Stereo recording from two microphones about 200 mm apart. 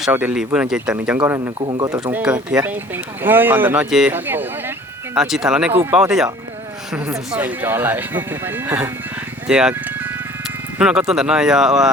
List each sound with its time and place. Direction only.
0.0 s speech: 10° right (ahead or behind)
1.2 s speech: 15° right (ahead or behind)
2.0 s speech: 5° right (ahead or behind)